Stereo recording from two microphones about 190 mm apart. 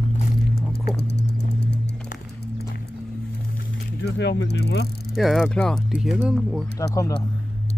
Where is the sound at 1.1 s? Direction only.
60° left (ahead or behind).